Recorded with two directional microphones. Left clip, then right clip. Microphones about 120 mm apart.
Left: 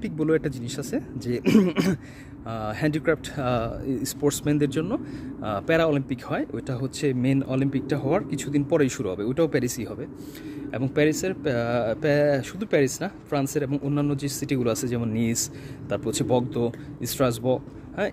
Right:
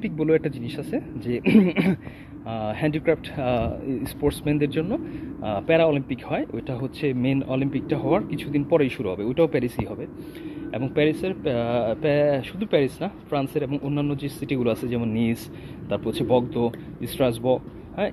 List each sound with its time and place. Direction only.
0.0 s speech: 35° left (ahead or behind)